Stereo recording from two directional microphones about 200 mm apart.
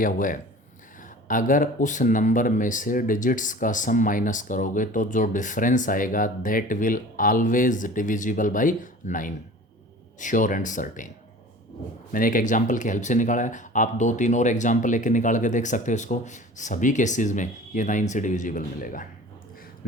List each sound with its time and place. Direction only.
0.0 s speech: 40° left (ahead or behind)
12.1 s speech: 45° left (ahead or behind)